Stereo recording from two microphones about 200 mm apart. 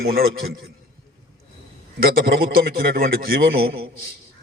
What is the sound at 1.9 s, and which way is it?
A man's voice, 50° right (ahead or behind).